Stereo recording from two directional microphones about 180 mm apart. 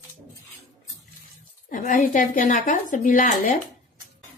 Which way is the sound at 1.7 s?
45° left (ahead or behind).